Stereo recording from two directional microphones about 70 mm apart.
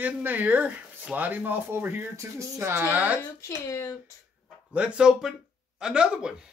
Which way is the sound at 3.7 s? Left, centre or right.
Left.